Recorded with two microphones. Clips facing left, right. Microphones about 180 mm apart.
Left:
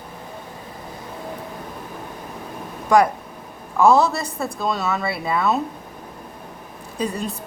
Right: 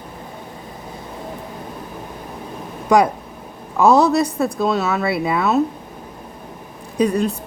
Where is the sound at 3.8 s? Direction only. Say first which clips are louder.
Right 3 dB; 20° right (ahead or behind).